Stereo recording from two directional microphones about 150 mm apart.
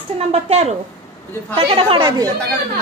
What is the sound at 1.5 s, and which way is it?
Speech, 35° right (ahead or behind).